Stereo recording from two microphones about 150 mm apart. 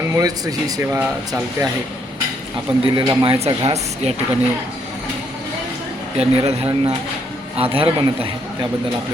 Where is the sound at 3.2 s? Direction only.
40° right (ahead or behind).